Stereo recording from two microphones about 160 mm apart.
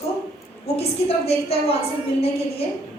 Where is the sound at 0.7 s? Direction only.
40° left (ahead or behind).